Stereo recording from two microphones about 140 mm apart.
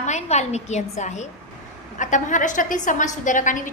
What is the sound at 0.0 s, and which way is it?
A woman's voice, 55° left (ahead or behind).